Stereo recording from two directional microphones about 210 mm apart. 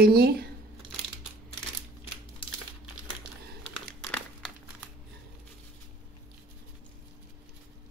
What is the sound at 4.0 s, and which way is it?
Crumpling, 5° left (ahead or behind).